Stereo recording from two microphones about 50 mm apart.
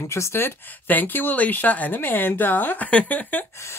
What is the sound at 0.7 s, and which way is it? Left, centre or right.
Speech, left.